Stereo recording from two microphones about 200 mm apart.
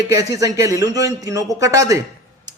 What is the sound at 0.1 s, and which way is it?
A man's voice, 15° right (ahead or behind).